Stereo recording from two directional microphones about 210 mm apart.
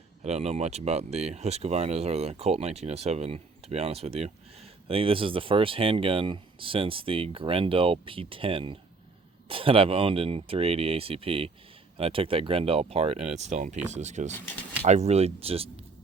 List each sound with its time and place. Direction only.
0.2 s speech: 30° right (ahead or behind)